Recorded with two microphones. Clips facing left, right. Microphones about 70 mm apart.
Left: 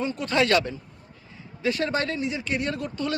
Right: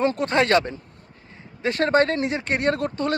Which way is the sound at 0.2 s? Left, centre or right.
Right.